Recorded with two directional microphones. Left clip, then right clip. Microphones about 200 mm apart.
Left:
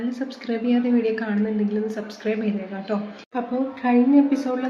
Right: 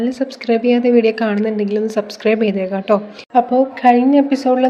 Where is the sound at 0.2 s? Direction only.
40° right (ahead or behind).